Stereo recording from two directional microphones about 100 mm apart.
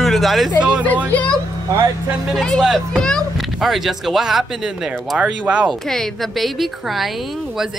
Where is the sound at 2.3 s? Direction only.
Centre (ahead or behind).